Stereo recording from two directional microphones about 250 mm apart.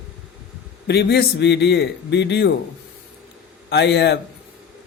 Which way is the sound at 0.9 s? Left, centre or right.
Left.